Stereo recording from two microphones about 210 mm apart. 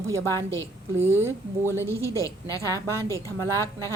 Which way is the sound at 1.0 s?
10° right (ahead or behind).